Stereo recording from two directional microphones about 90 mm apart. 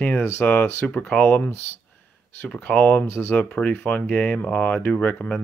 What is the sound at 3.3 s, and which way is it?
Speech, 15° left (ahead or behind).